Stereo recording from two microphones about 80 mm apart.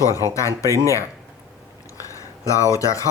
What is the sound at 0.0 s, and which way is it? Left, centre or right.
Speech, left.